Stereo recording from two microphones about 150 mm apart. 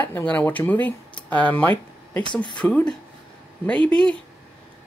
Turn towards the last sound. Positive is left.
turn(degrees=10)  # may be behind; listen again after turning